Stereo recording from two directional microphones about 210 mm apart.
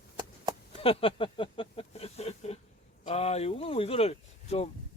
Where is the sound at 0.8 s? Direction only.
25° left (ahead or behind).